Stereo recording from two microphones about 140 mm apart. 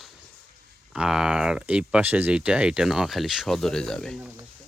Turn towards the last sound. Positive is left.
turn(degrees=5)  # may be behind; listen again after turning